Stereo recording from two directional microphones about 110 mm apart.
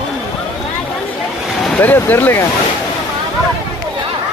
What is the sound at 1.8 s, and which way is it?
Speech, 20° left (ahead or behind).